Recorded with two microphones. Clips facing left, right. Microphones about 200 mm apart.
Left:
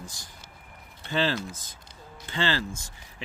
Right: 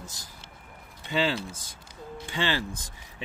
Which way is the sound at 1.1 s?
10° right (ahead or behind).